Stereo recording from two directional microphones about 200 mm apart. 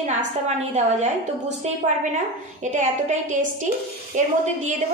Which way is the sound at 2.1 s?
35° right (ahead or behind).